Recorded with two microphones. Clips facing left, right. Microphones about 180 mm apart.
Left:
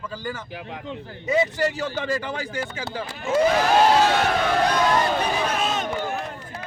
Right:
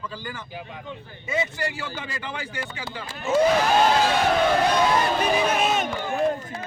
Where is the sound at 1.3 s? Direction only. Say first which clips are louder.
Left 6 dB; 40° left (ahead or behind).